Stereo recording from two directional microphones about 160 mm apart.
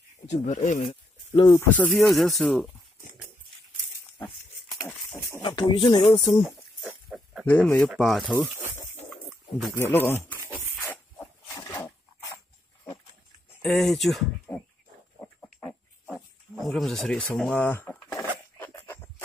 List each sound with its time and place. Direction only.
0.3 s speech: 45° left (ahead or behind)
1.3 s speech: 25° left (ahead or behind)
1.7 s speech: 5° left (ahead or behind)
5.4 s speech: 30° left (ahead or behind)
6.4 s pig: centre (ahead or behind)
7.4 s speech: 10° left (ahead or behind)
9.8 s speech: 15° left (ahead or behind)
10.9 s a sound: 10° left (ahead or behind)
13.6 s speech: 5° left (ahead or behind)
15.1 s wild animals: 5° left (ahead or behind)
17.3 s a sound: 10° left (ahead or behind)